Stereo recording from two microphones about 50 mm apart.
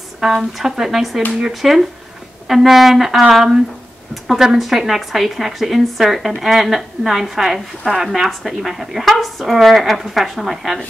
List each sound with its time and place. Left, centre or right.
0.2 s speech: centre